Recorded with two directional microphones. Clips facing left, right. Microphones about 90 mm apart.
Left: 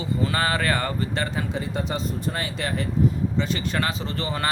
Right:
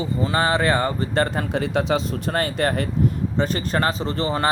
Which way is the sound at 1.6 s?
90° right.